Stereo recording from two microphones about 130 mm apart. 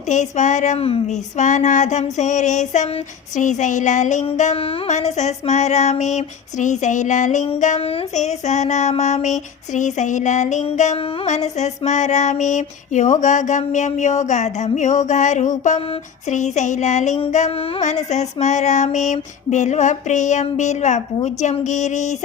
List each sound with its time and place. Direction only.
0.1 s speech: 65° left (ahead or behind)
4.5 s female singing: 45° left (ahead or behind); by 7.4 s 70° left (ahead or behind)
7.8 s female singing: 45° left (ahead or behind)
11.3 s female singing: 60° left (ahead or behind)
17.3 s music: 55° left (ahead or behind)
17.8 s female singing: 60° left (ahead or behind)